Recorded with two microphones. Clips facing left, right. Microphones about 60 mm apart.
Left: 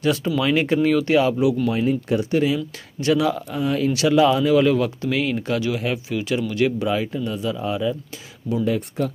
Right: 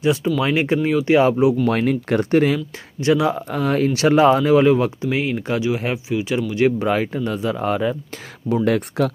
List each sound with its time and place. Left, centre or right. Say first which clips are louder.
0.0 s speech: right 2 dB; centre
1.1 s speech: right 3 dB; right
1.7 s speech: right 2 dB; right
2.3 s speech: right 4 dB; right
3.0 s speech: right 2 dB; right
3.5 s speech: right 2 dB; right
8.6 s speech: right 5 dB; right